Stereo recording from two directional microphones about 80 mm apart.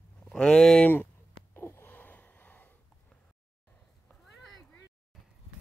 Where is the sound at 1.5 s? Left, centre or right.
Left.